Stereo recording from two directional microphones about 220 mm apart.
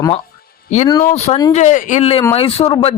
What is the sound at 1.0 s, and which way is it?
Speech, 30° left (ahead or behind).